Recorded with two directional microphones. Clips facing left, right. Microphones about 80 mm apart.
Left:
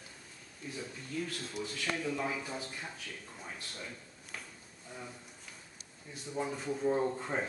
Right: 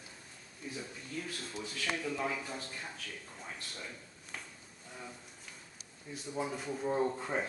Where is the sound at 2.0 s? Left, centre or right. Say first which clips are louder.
Left 3 dB; centre.